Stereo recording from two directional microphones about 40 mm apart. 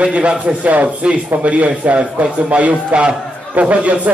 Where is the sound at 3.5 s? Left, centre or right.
Right.